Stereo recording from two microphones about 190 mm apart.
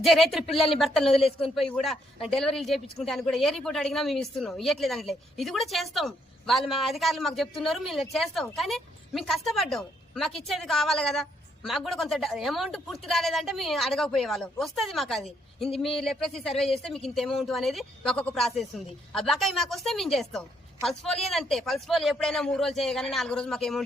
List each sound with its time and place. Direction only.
0.0 s a woman's voice: centre (ahead or behind)